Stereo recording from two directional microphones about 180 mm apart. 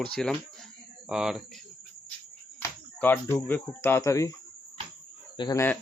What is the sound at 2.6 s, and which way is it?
Speech, 10° left (ahead or behind).